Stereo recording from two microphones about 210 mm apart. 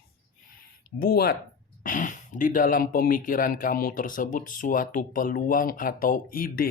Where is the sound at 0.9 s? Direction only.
45° left (ahead or behind).